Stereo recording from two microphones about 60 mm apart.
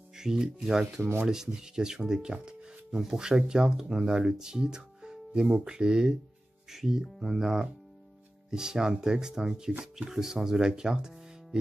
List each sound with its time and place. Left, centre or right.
0.1 s speech: centre